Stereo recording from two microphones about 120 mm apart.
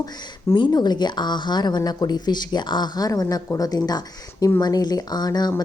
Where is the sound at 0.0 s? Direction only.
35° left (ahead or behind).